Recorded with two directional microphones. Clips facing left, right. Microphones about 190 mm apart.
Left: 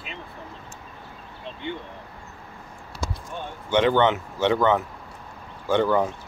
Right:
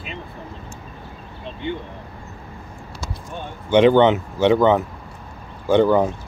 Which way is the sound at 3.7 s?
15° right (ahead or behind).